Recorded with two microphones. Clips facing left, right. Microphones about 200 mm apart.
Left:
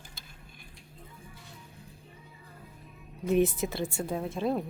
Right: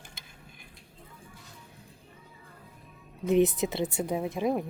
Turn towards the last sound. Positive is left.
turn(degrees=-15)  # may be behind; listen again after turning